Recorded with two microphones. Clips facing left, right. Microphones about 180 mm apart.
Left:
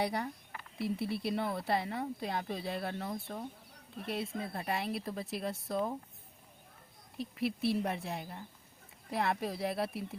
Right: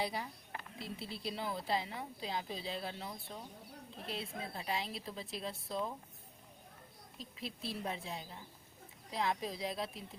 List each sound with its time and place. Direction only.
0.0 s a woman's voice: 60° left (ahead or behind)
7.2 s a woman's voice: 65° left (ahead or behind)